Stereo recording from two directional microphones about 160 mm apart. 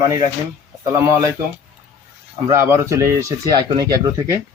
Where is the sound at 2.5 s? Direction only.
15° right (ahead or behind).